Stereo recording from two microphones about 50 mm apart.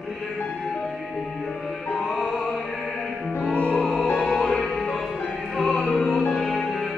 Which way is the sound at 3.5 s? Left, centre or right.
Left.